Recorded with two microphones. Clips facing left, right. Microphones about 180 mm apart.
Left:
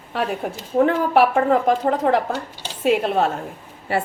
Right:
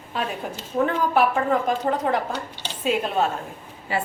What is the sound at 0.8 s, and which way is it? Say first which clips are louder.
A woman's voice: left 2 dB; 70° left (ahead or behind).